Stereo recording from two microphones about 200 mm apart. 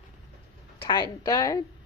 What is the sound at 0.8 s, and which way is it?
Speech, 20° left (ahead or behind).